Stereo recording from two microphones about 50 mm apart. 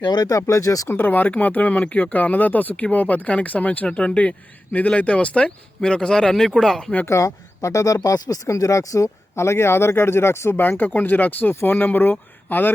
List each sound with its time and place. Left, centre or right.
0.3 s speech: left
0.9 s speech: left
3.8 s speech: left; by 6.7 s centre
7.1 s speech: left
9.3 s speech: left
10.5 s speech: left